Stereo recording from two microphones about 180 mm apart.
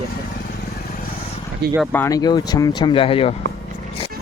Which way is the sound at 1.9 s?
15° left (ahead or behind).